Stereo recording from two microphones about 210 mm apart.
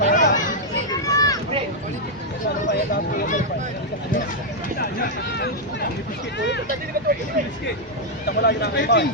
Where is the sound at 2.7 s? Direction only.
40° left (ahead or behind).